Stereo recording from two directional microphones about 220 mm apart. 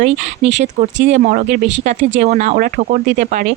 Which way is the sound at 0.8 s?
30° right (ahead or behind).